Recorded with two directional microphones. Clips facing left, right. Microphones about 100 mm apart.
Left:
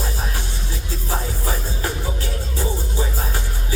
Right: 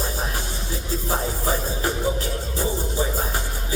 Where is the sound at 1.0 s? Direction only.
25° right (ahead or behind).